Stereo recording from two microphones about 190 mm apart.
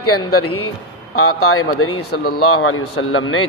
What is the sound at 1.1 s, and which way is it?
Speech, 90° left.